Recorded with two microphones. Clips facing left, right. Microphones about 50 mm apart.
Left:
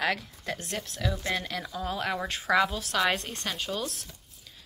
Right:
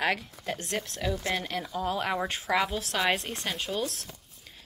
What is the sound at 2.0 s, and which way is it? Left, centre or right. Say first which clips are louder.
Speech: right 1 dB; centre.